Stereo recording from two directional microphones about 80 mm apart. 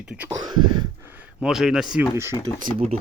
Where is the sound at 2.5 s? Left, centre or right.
Left.